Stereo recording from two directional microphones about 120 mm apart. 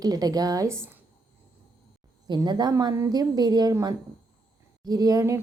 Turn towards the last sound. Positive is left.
turn(degrees=-25)  # may be behind; listen again after turning